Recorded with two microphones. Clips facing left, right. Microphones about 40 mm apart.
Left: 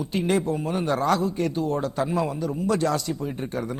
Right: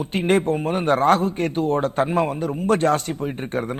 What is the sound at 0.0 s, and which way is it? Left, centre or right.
A man's voice, right.